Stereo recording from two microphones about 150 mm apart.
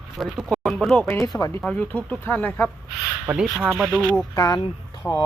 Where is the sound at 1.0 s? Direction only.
20° left (ahead or behind).